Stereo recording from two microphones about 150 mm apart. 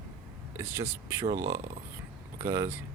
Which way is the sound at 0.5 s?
20° right (ahead or behind).